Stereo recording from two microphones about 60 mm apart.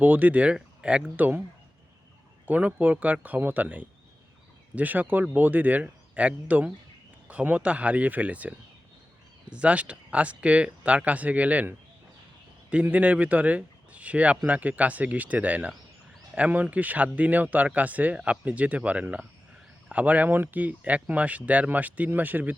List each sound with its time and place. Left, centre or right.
0.0 s speech: right
1.1 s speech: right
2.5 s speech: right
12.7 s speech: right